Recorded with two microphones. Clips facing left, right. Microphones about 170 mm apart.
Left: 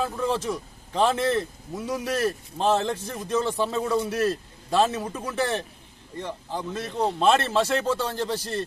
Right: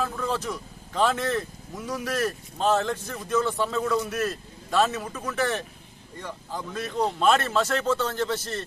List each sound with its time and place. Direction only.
0.0 s a man's voice: 25° left (ahead or behind)